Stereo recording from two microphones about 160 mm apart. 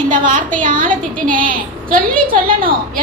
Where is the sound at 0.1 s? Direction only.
55° right (ahead or behind).